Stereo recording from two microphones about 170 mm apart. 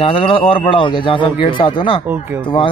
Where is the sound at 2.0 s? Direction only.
10° right (ahead or behind).